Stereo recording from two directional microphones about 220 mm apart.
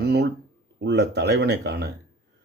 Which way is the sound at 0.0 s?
50° right (ahead or behind).